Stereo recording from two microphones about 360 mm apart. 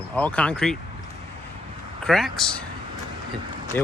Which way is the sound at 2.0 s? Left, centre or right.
Centre.